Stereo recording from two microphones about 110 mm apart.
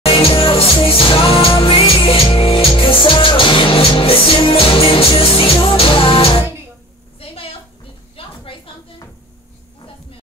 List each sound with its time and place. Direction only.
0.0 s music: 60° left (ahead or behind)